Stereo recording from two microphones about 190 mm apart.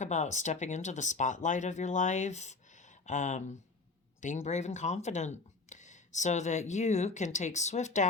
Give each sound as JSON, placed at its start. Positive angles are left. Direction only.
{"t": 0.0, "sound": "speech", "side_deg": 40}
{"t": 4.4, "sound": "speech", "side_deg": 35}